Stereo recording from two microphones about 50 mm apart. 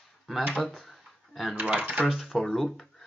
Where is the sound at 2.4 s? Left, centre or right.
Centre.